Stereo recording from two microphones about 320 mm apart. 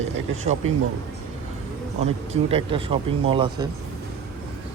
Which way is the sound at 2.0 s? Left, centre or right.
Centre.